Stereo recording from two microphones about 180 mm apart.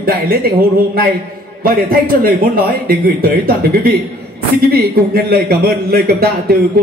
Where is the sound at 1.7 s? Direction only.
55° right (ahead or behind).